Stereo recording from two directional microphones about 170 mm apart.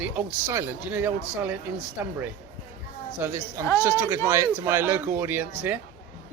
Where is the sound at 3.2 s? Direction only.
15° right (ahead or behind).